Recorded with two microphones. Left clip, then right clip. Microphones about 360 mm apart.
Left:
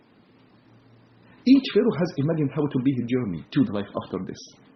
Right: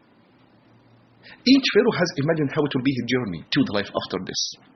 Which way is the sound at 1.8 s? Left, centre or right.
Right.